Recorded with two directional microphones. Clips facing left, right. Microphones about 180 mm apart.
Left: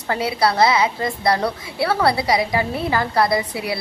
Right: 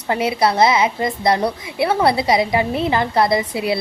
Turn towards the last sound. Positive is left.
turn(degrees=-25)  # may be behind; listen again after turning